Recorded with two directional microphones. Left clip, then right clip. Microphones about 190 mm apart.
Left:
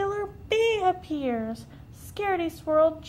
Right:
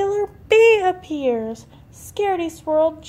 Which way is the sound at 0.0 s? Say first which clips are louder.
Right 8 dB; 45° right (ahead or behind).